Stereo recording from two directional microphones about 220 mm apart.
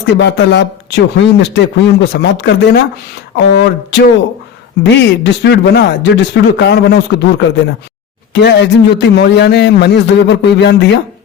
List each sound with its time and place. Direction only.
0.1 s speech: 55° left (ahead or behind)
8.3 s speech: 50° left (ahead or behind)